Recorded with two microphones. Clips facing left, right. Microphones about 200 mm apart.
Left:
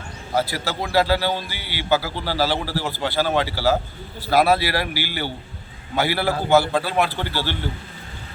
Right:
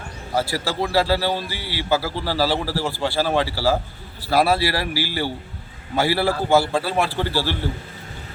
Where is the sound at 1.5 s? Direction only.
35° right (ahead or behind).